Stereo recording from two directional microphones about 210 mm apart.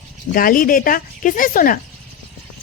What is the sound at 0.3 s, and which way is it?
Speech, 45° left (ahead or behind).